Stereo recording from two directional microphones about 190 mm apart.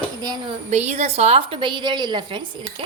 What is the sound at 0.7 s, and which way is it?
Speech, 35° right (ahead or behind).